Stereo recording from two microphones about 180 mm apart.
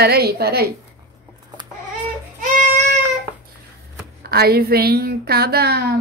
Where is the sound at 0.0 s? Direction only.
60° right (ahead or behind).